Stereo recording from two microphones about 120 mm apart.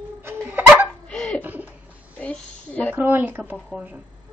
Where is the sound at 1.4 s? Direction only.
15° right (ahead or behind).